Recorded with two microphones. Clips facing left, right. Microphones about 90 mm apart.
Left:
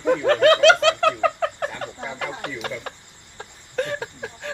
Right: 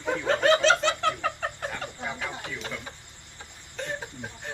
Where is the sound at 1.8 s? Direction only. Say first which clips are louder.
Left 4 dB; 60° left (ahead or behind).